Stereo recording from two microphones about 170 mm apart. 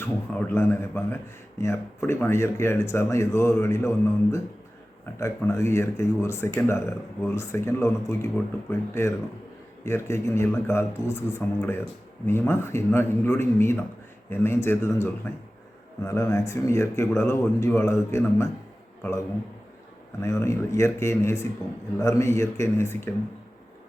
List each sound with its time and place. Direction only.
0.0 s speech: 10° left (ahead or behind)
20.2 s speech: 15° left (ahead or behind)